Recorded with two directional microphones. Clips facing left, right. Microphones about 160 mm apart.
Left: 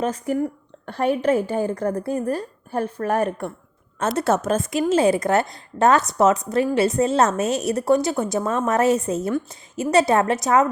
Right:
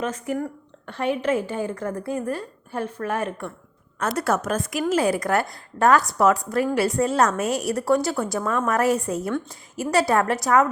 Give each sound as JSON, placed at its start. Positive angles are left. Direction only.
{"t": 0.0, "sound": "a woman's voice", "side_deg": 35}
{"t": 4.2, "sound": "a woman's voice", "side_deg": 25}